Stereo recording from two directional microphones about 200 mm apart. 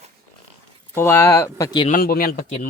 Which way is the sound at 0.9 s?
10° left (ahead or behind).